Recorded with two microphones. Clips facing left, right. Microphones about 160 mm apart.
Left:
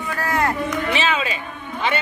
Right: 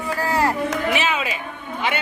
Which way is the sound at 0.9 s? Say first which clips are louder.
Left 1 dB; 10° right (ahead or behind).